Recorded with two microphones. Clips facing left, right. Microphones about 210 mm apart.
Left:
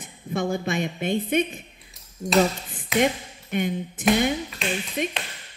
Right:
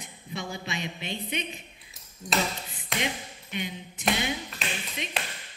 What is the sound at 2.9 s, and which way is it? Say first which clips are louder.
Speech: left 10 dB; 50° left (ahead or behind).